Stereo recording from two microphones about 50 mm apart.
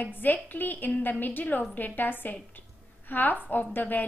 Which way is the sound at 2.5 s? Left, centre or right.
Left.